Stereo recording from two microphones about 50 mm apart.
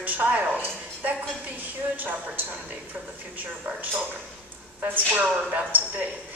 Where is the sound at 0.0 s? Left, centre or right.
Right.